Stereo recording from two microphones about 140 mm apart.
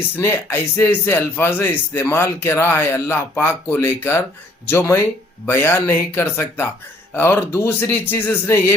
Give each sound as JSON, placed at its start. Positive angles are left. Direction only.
{"t": 0.2, "sound": "speech", "side_deg": 20}